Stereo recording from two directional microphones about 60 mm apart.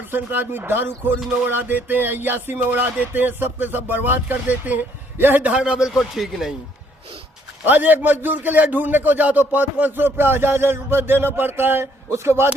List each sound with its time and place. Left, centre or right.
0.1 s music: right
5.4 s a man's voice: centre
7.6 s a man's voice: right
7.9 s music: right